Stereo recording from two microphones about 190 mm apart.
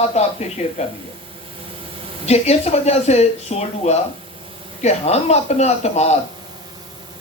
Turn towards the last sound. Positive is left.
turn(degrees=35)  # may be behind; listen again after turning